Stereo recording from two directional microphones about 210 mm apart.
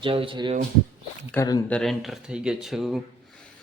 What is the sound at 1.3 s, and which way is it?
Speech, 15° left (ahead or behind).